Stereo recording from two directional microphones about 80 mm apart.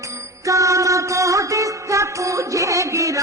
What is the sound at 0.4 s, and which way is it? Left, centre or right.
Music, right.